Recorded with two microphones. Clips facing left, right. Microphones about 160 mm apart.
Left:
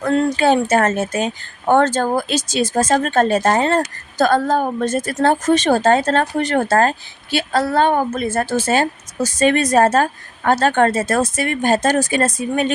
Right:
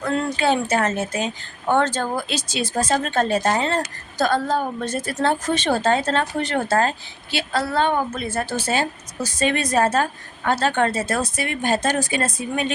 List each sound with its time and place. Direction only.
0.0 s speech: 45° left (ahead or behind)